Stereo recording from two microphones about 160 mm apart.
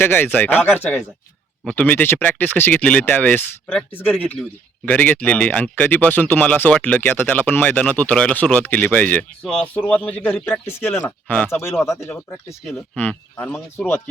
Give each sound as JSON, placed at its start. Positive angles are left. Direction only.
{"t": 0.0, "sound": "speech", "side_deg": 10}